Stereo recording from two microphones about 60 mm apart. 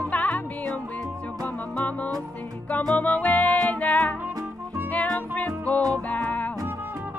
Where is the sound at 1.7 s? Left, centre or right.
Left.